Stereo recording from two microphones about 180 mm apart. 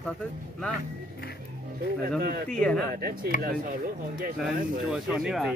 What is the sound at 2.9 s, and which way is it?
Speech, 60° right (ahead or behind).